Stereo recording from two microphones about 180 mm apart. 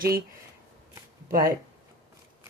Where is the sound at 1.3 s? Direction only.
55° right (ahead or behind).